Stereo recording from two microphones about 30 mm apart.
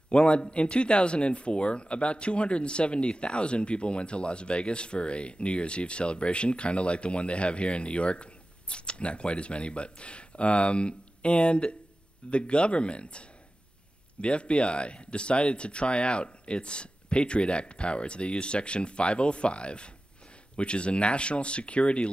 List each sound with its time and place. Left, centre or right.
0.1 s speech: left
14.2 s speech: left